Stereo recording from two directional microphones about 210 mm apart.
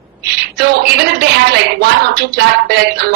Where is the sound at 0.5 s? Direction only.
50° right (ahead or behind).